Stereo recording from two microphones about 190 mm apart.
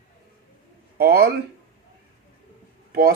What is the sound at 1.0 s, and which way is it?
Speech, 55° right (ahead or behind).